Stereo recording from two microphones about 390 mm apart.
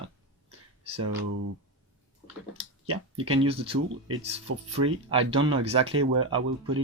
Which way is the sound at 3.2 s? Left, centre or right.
Centre.